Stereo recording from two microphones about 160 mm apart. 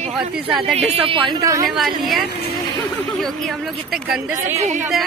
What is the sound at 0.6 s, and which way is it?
A woman's voice, 40° right (ahead or behind).